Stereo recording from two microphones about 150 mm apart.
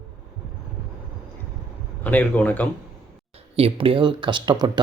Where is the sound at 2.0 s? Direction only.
10° left (ahead or behind).